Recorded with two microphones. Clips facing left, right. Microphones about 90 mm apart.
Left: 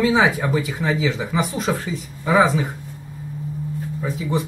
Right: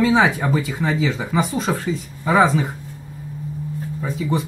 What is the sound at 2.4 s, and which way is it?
Speech, centre (ahead or behind).